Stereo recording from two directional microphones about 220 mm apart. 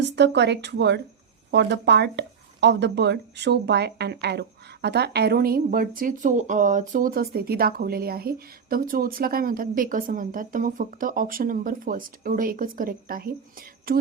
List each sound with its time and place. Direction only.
0.0 s speech: 50° right (ahead or behind)